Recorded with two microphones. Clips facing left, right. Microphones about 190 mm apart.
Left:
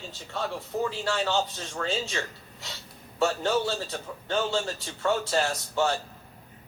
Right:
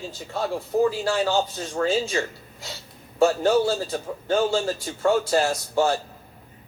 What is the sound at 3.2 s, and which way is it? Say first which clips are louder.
Speech: right 7 dB; 40° right (ahead or behind).